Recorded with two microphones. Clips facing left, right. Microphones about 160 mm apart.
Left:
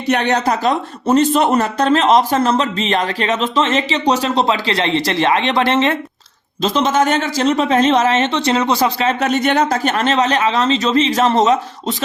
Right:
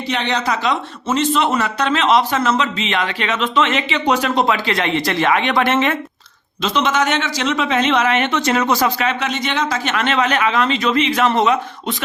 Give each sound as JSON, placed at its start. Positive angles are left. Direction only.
{"t": 0.1, "sound": "speech", "side_deg": 55}
{"t": 0.3, "sound": "speech", "side_deg": 40}